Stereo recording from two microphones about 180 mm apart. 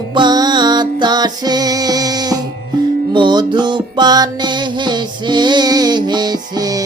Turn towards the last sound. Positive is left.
turn(degrees=-20)  # may be behind; listen again after turning